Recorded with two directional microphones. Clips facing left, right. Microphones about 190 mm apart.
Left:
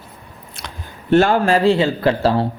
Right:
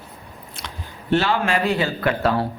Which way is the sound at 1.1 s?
50° left (ahead or behind).